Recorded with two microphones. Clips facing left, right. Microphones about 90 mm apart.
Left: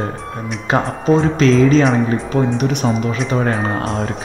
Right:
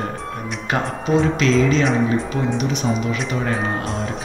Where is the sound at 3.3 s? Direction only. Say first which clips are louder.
Left 4 dB; 40° left (ahead or behind).